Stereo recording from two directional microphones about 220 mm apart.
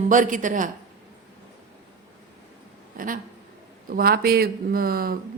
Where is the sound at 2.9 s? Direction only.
40° right (ahead or behind).